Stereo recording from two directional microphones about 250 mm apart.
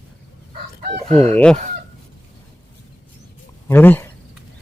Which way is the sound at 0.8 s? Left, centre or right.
Right.